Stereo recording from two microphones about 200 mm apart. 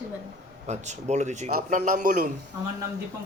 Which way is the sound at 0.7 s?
35° right (ahead or behind).